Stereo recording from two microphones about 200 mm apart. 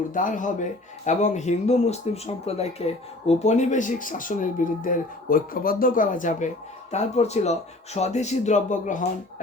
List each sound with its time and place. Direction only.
0.1 s speech: 40° left (ahead or behind)